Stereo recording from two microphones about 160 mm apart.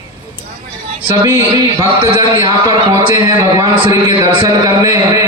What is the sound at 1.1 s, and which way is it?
Speech, 20° right (ahead or behind).